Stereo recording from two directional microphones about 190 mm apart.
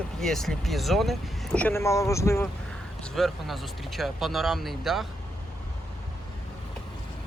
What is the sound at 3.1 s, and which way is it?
Speech, centre (ahead or behind).